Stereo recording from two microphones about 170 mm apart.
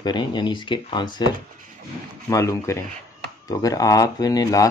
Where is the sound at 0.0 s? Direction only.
25° left (ahead or behind).